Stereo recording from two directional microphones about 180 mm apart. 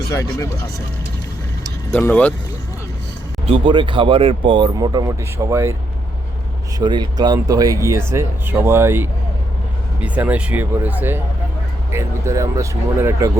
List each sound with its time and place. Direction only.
0.1 s speech: 15° left (ahead or behind)
1.9 s speech: 10° left (ahead or behind)
3.5 s speech: 25° right (ahead or behind)
6.7 s speech: 25° right (ahead or behind)